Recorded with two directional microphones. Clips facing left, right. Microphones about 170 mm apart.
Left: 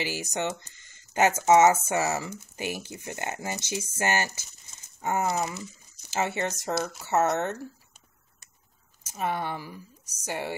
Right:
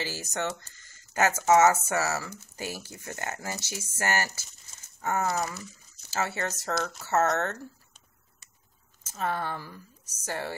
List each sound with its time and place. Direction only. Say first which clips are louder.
0.0 s speech: left 2 dB; 15° left (ahead or behind)
9.0 s speech: left 1 dB; 15° left (ahead or behind)